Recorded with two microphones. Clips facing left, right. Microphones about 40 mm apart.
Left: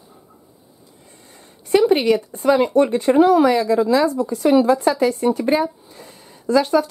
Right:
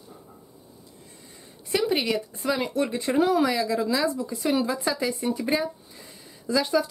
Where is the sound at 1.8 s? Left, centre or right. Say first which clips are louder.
Left 9 dB; centre.